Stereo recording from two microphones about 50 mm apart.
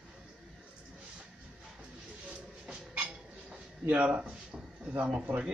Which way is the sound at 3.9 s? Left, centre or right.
Right.